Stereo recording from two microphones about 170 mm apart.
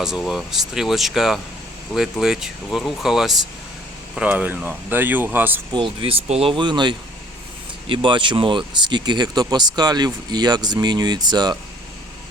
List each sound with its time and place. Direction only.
0.0 s speech: centre (ahead or behind)
5.7 s speech: 30° right (ahead or behind)